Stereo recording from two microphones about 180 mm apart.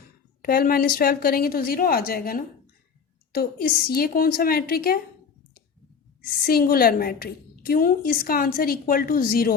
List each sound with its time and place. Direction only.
0.4 s a woman's voice: 55° left (ahead or behind)
6.4 s a woman's voice: 55° left (ahead or behind)